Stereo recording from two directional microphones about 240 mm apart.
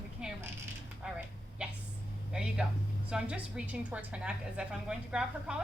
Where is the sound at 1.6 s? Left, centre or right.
Centre.